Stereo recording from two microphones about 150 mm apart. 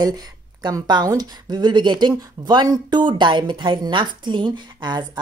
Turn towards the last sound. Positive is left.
turn(degrees=-30)  # may be behind; listen again after turning